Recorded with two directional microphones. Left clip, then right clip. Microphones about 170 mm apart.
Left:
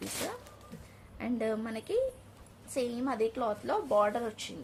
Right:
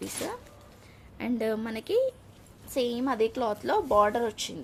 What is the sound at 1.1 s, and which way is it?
A woman's voice, 45° right (ahead or behind).